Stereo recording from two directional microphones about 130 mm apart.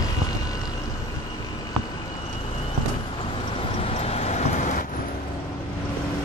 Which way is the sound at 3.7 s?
50° left (ahead or behind).